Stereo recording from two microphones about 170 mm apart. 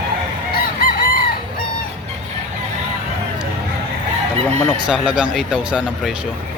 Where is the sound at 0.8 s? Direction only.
55° left (ahead or behind).